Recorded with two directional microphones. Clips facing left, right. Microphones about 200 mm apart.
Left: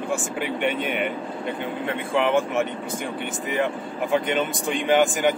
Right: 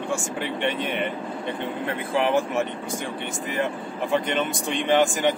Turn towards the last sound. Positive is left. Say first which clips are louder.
# left 1 dB
turn(degrees=0)  # may be behind; listen again after turning